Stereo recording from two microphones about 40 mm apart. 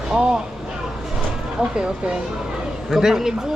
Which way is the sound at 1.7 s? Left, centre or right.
Right.